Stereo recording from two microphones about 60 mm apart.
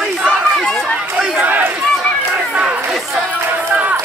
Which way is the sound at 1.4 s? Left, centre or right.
Right.